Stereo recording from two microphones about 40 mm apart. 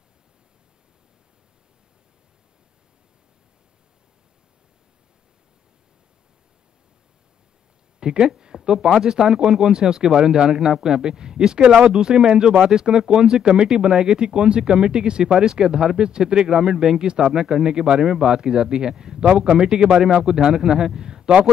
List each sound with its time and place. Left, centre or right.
8.0 s speech: centre